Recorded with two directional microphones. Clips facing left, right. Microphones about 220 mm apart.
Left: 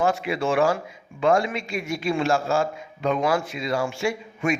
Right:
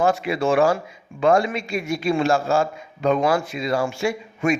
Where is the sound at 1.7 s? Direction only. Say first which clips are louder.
Right 4 dB; 40° right (ahead or behind).